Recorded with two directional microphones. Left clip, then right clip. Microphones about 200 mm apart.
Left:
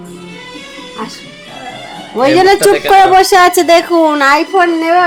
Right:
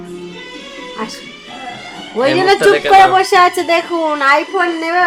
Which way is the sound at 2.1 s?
50° left (ahead or behind).